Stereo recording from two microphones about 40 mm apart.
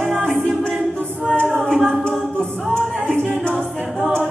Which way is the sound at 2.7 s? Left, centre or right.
Left.